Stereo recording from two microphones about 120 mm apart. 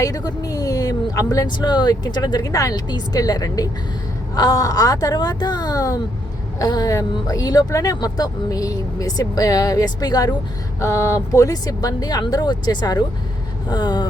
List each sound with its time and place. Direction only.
0.0 s a woman's voice: 30° left (ahead or behind)